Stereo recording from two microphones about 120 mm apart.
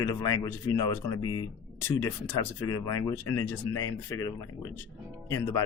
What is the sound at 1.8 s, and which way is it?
Speech, 20° left (ahead or behind).